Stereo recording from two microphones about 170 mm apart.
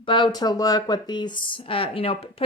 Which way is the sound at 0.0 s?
30° left (ahead or behind).